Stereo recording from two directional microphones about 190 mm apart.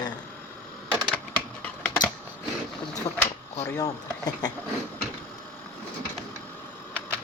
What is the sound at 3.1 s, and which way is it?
Speech, 25° left (ahead or behind).